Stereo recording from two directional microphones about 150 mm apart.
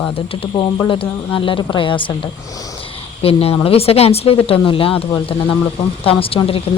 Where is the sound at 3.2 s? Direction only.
40° left (ahead or behind).